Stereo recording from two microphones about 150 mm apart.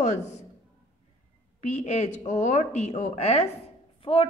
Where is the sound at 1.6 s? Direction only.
50° left (ahead or behind).